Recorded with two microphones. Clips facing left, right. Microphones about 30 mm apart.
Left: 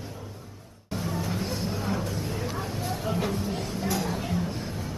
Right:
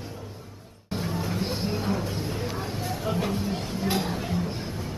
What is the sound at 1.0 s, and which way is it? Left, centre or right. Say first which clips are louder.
Music: right 1 dB; right.